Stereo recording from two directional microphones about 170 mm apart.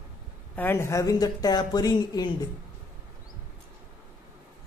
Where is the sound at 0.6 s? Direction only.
15° left (ahead or behind).